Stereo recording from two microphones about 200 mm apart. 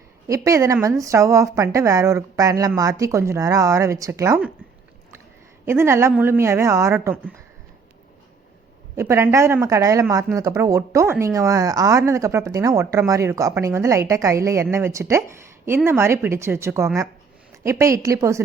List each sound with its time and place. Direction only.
0.3 s speech: 15° right (ahead or behind)
5.6 s speech: 10° right (ahead or behind)
9.0 s speech: 15° right (ahead or behind)